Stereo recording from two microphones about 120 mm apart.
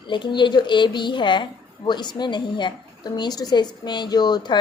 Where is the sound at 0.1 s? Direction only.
40° left (ahead or behind).